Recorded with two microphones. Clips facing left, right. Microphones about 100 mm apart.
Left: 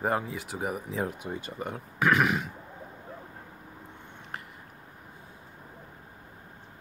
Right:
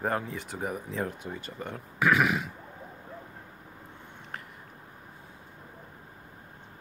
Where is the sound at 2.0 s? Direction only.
Centre (ahead or behind).